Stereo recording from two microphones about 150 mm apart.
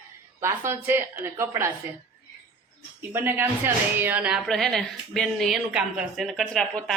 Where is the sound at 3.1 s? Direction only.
15° right (ahead or behind).